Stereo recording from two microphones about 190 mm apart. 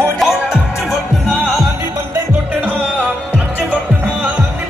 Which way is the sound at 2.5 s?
5° right (ahead or behind).